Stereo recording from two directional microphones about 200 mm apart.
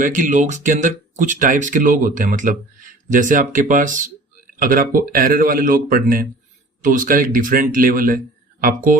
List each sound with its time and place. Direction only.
0.0 s speech: 40° right (ahead or behind)